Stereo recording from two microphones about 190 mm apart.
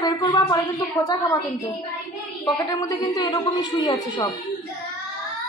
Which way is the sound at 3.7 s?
25° left (ahead or behind).